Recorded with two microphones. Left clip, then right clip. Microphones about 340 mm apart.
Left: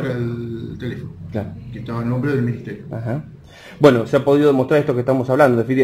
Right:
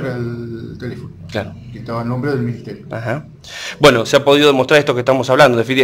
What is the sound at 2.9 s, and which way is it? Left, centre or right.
A man's voice, right.